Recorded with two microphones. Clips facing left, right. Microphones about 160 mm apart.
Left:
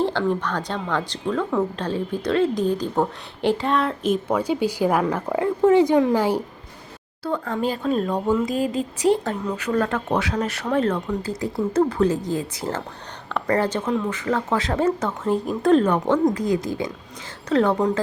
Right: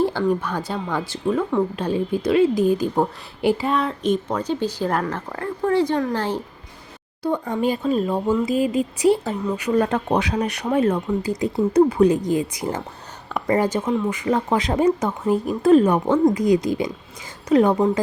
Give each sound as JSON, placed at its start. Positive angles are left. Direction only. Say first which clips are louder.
{"t": 0.0, "sound": "speech", "louder": "right 2 dB", "side_deg": -10}
{"t": 7.3, "sound": "speech", "louder": "right 3 dB", "side_deg": -15}
{"t": 9.6, "sound": "speech", "louder": "right 4 dB", "side_deg": -10}